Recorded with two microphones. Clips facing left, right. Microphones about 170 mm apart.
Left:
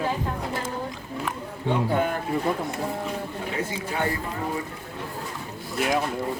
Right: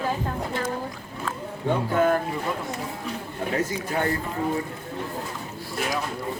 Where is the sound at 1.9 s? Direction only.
45° right (ahead or behind).